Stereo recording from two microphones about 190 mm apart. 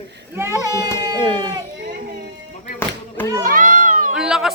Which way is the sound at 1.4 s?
20° right (ahead or behind).